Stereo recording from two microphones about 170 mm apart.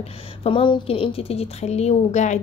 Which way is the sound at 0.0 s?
35° left (ahead or behind).